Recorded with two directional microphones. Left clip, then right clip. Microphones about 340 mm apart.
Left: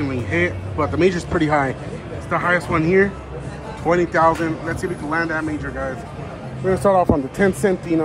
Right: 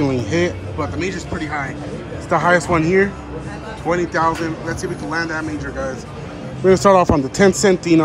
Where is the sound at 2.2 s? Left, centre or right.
Centre.